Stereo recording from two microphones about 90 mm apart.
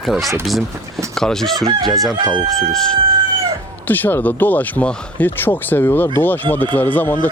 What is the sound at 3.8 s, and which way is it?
Speech, 20° left (ahead or behind).